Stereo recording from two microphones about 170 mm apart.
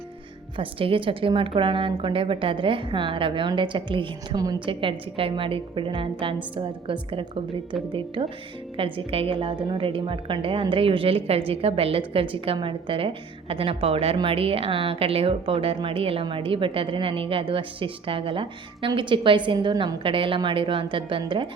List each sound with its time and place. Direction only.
0.5 s a woman's voice: 30° right (ahead or behind)